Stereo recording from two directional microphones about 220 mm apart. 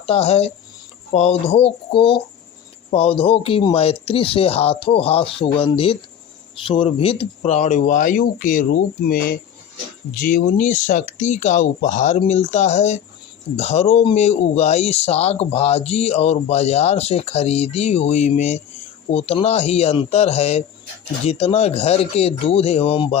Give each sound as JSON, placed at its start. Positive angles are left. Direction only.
{"t": 0.0, "sound": "speech", "side_deg": 30}